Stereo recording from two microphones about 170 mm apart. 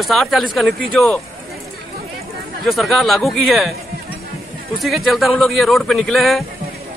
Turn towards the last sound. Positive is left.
turn(degrees=0)  # may be behind; listen again after turning